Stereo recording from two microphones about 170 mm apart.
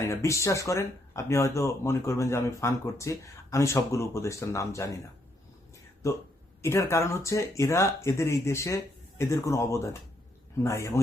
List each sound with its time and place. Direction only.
0.0 s speech: 15° left (ahead or behind)
6.0 s speech: 15° left (ahead or behind)